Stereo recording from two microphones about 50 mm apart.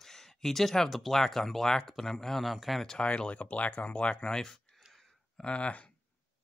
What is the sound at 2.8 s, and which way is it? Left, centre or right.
Speech, centre.